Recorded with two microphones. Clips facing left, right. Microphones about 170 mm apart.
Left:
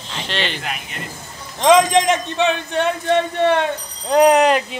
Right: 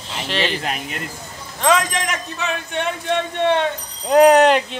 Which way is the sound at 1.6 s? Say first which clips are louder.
Left 6 dB; 30° left (ahead or behind).